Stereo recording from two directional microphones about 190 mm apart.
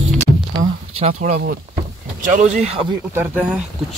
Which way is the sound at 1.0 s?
40° right (ahead or behind).